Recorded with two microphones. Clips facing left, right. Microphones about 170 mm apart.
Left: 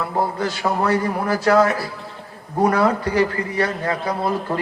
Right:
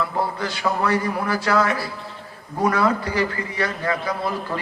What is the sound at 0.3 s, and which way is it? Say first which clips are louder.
A man's voice: left 2 dB; 40° left (ahead or behind).